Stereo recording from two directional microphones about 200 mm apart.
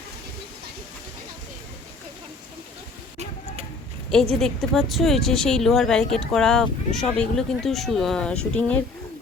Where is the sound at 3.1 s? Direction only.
35° right (ahead or behind).